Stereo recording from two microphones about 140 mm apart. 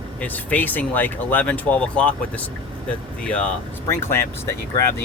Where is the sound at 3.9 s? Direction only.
15° left (ahead or behind).